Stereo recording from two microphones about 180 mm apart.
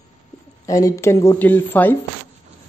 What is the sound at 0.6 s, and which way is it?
Speech, 20° left (ahead or behind).